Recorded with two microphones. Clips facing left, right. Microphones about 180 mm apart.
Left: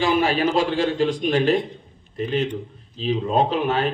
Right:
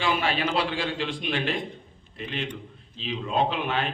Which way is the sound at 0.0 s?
40° left (ahead or behind).